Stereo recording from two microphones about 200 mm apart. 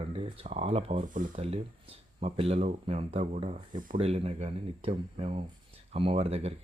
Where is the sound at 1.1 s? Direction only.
40° right (ahead or behind).